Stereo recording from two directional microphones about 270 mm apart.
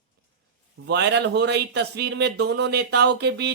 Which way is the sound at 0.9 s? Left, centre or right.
Right.